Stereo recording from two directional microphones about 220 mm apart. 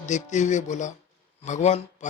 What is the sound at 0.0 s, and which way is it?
Speech, 35° left (ahead or behind).